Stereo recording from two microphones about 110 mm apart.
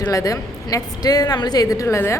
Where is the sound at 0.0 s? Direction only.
30° left (ahead or behind).